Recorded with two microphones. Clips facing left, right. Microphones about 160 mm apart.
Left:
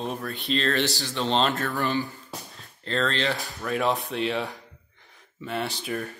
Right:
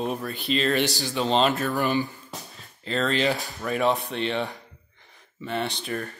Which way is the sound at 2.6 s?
5° right (ahead or behind).